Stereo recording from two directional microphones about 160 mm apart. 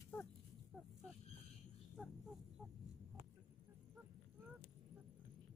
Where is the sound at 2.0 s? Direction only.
5° right (ahead or behind).